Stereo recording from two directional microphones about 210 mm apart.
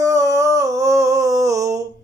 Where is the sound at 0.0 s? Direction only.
15° right (ahead or behind).